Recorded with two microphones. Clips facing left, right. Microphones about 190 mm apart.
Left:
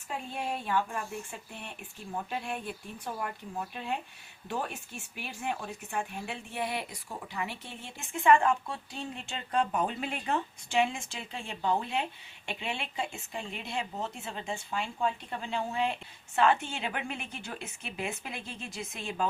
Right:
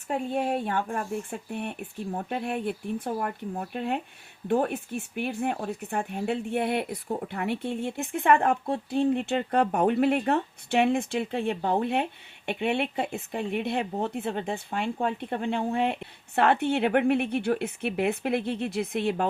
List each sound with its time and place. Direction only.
0.1 s speech: 55° right (ahead or behind)